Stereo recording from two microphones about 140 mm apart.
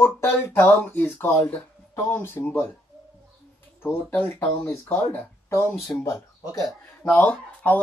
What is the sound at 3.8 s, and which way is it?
Speech, 15° left (ahead or behind).